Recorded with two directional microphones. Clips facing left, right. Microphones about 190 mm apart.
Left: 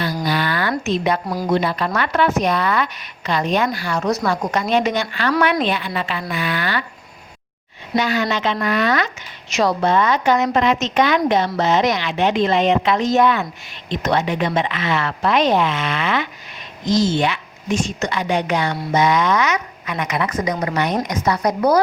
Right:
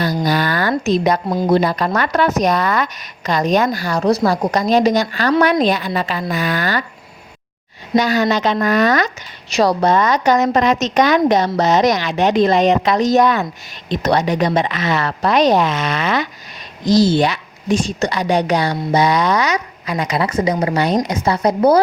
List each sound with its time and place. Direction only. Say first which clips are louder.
0.0 s a sound: right 4 dB; 40° right (ahead or behind)
0.9 s speech: right 5 dB; 40° right (ahead or behind)
7.9 s speech: right 4 dB; 40° right (ahead or behind)